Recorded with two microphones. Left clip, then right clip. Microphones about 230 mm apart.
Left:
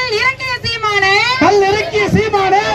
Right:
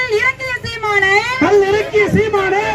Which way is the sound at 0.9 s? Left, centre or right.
Left.